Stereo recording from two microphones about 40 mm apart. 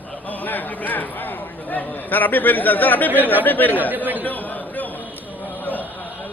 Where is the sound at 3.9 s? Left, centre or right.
Right.